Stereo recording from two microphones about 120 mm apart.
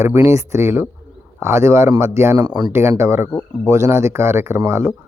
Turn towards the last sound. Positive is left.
turn(degrees=-20)  # may be behind; listen again after turning